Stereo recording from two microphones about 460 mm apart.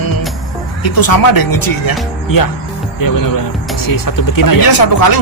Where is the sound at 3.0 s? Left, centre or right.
Left.